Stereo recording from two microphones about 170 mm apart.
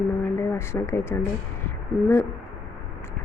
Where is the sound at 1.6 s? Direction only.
15° left (ahead or behind).